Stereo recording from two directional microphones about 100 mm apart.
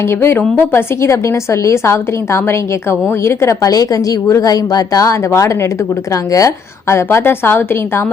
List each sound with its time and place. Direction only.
0.2 s a woman's voice: 20° left (ahead or behind)